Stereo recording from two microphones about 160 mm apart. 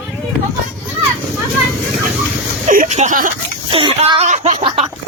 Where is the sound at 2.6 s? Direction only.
50° right (ahead or behind).